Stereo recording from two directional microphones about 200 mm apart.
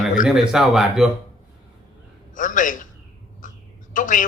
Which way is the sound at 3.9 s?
40° left (ahead or behind).